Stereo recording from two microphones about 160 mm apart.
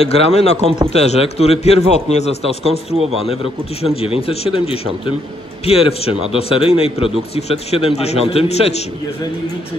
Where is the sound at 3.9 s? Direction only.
35° left (ahead or behind).